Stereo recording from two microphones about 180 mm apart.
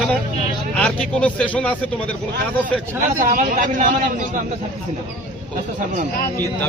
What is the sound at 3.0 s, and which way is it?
A man's voice, 50° right (ahead or behind).